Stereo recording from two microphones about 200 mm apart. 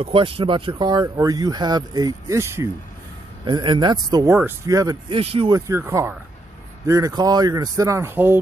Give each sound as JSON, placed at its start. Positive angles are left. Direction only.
{"t": 0.0, "sound": "speech", "side_deg": -25}
{"t": 5.2, "sound": "speech", "side_deg": -30}
{"t": 5.5, "sound": "speech", "side_deg": -15}